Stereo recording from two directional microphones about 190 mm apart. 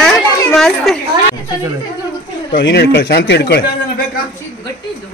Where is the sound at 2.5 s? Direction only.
65° left (ahead or behind).